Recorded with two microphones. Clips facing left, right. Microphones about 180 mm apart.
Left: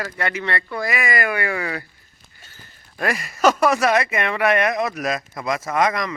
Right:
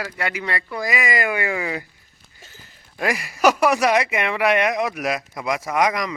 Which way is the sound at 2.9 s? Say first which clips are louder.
Even; 15° right (ahead or behind).